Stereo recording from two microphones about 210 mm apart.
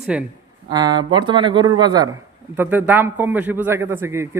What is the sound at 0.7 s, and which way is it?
A man's voice, 20° right (ahead or behind).